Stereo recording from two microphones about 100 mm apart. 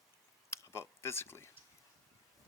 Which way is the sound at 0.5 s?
25° left (ahead or behind).